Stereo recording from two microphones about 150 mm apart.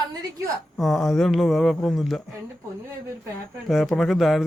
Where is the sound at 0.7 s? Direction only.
Centre (ahead or behind).